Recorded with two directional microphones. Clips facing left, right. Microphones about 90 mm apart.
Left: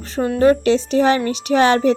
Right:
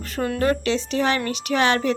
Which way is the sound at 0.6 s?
35° left (ahead or behind).